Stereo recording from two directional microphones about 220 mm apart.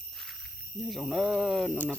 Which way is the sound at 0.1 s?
Centre (ahead or behind).